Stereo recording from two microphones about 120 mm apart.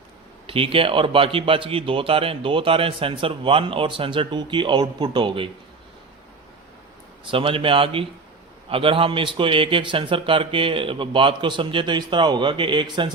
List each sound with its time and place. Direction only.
0.4 s speech: 50° right (ahead or behind)
7.3 s speech: 50° right (ahead or behind)